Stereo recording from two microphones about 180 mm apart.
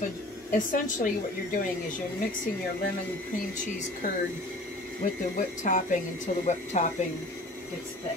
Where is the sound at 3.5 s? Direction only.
45° left (ahead or behind).